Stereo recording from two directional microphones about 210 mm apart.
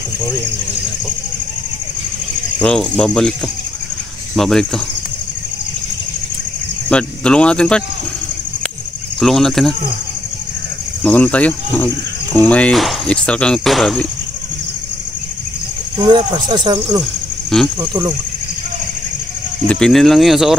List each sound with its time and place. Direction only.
2.6 s cricket: 5° left (ahead or behind)
4.4 s cricket: centre (ahead or behind)
6.9 s cricket: 5° left (ahead or behind)
9.2 s cricket: centre (ahead or behind)
11.1 s speech: 5° left (ahead or behind)
12.4 s cricket: 5° left (ahead or behind)
16.0 s speech: 20° right (ahead or behind)
19.7 s cricket: centre (ahead or behind)